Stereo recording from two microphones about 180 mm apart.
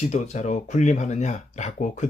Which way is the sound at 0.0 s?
40° left (ahead or behind).